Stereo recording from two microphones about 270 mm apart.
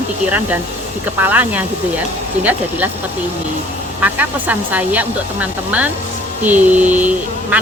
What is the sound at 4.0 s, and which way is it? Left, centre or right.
Speech, centre.